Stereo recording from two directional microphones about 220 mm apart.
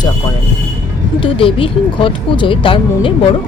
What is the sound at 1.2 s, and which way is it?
Speech, 25° left (ahead or behind).